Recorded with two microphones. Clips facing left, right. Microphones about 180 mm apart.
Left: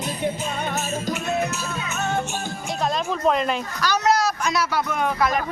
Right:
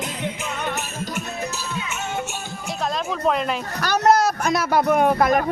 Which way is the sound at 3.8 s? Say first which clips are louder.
Right 4 dB; 55° right (ahead or behind).